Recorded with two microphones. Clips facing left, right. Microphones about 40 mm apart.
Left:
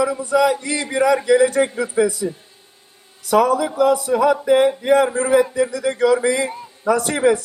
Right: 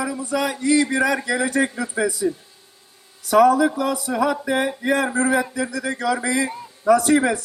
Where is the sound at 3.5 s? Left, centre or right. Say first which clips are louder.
Left 3 dB; left.